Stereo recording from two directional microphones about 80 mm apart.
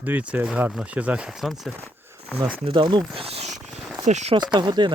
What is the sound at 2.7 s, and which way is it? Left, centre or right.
Speech, right.